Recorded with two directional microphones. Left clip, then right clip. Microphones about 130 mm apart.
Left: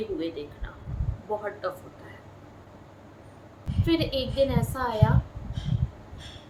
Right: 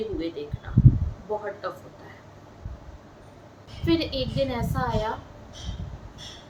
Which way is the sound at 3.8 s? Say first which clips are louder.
Right 1 dB; 10° left (ahead or behind).